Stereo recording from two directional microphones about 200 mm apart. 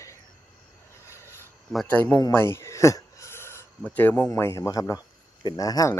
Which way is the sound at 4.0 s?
10° left (ahead or behind).